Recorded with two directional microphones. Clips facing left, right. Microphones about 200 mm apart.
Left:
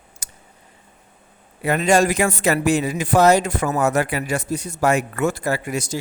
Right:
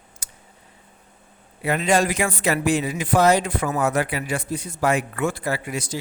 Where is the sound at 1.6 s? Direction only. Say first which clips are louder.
Left 3 dB; 45° left (ahead or behind).